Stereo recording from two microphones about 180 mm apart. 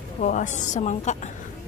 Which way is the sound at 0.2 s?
45° left (ahead or behind).